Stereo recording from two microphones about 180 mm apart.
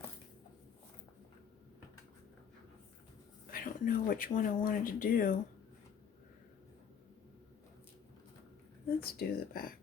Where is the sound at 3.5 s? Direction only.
50° left (ahead or behind).